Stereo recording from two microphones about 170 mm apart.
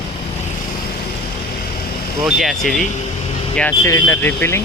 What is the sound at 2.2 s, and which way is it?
Speech, centre (ahead or behind).